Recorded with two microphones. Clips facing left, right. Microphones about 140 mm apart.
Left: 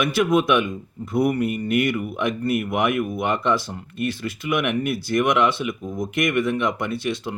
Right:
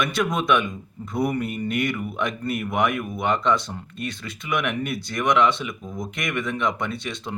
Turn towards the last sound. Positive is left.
turn(degrees=5)  # may be behind; listen again after turning